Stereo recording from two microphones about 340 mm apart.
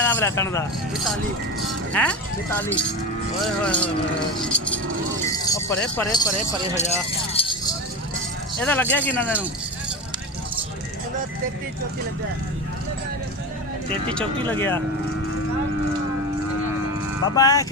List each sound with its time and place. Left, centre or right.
0.0 s speech: centre
1.9 s speech: centre
5.2 s jingle bell: centre
7.3 s a sound: centre
8.6 s speech: centre
14.1 s speech: centre
17.2 s speech: centre